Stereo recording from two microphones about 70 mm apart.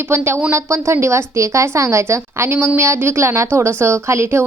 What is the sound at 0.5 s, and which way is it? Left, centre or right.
Speech, right.